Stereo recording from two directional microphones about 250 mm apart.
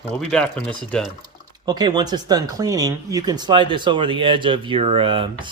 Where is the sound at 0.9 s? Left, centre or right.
Centre.